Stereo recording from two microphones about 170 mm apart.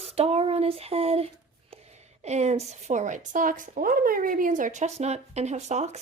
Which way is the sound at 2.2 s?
40° right (ahead or behind).